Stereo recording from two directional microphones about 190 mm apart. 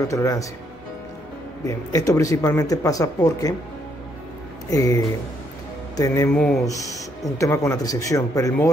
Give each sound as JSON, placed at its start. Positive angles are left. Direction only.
{"t": 0.0, "sound": "speech", "side_deg": 15}
{"t": 1.7, "sound": "speech", "side_deg": 15}
{"t": 4.6, "sound": "speech", "side_deg": 20}
{"t": 6.3, "sound": "speech", "side_deg": 5}
{"t": 7.3, "sound": "speech", "side_deg": 15}